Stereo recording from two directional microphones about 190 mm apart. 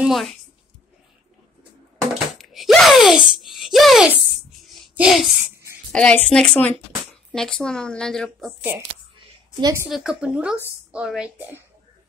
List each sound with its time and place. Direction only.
0.0 s speech: centre (ahead or behind)
2.1 s speech: centre (ahead or behind)
9.5 s a woman's voice: 20° right (ahead or behind)
9.8 s speech: centre (ahead or behind)